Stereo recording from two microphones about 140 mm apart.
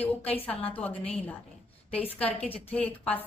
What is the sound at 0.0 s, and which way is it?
Speech, 10° left (ahead or behind).